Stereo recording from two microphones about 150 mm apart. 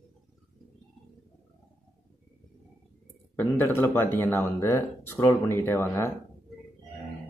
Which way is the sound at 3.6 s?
15° left (ahead or behind).